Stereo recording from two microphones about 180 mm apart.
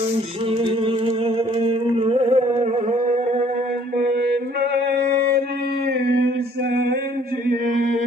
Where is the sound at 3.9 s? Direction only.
60° right (ahead or behind).